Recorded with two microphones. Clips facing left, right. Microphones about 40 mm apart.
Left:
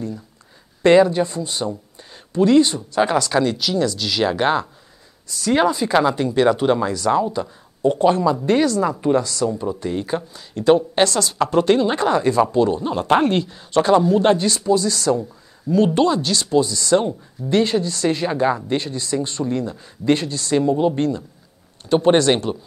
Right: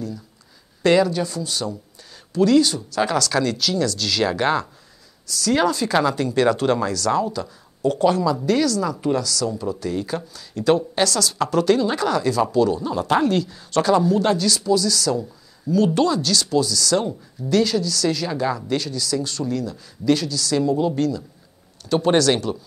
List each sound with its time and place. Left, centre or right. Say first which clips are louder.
0.8 s a woman's voice: left 4 dB; left